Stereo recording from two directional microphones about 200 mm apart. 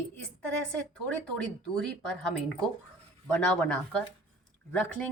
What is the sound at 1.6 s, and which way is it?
A woman's voice, 5° left (ahead or behind).